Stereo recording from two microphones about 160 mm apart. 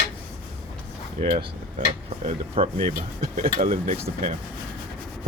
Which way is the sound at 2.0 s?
45° right (ahead or behind).